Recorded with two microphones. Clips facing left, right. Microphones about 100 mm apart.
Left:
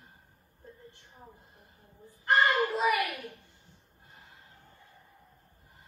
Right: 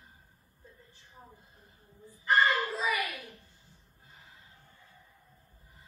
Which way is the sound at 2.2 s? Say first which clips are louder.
Left 1 dB; 60° left (ahead or behind).